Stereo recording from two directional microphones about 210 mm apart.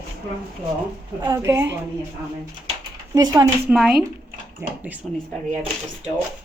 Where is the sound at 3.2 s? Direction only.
15° right (ahead or behind).